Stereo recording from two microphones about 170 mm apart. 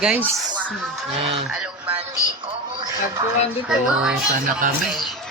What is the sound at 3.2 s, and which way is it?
Speech, 25° right (ahead or behind).